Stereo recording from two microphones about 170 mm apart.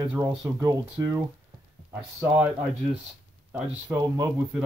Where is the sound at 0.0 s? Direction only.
25° right (ahead or behind).